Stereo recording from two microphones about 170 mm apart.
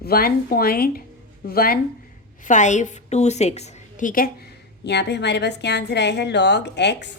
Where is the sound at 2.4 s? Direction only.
45° left (ahead or behind).